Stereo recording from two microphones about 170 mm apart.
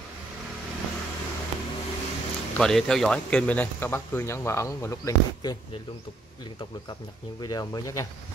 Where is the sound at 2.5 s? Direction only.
5° left (ahead or behind); by 5.5 s 20° left (ahead or behind).